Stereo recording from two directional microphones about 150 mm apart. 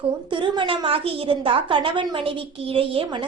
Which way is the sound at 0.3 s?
35° right (ahead or behind).